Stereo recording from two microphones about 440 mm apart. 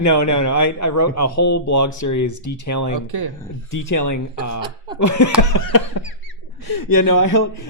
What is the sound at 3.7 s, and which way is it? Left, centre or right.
A man's voice, left.